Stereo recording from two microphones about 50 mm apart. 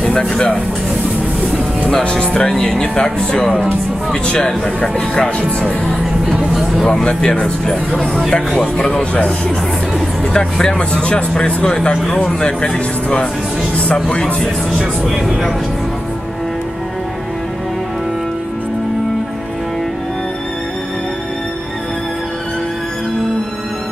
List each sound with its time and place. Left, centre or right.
0.0 s speech: centre
2.0 s speech: left
2.5 s speech: centre
7.1 s speech: centre
10.3 s speech: centre
14.7 s speech: centre